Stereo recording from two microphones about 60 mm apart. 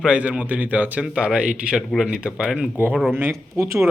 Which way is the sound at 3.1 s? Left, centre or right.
Right.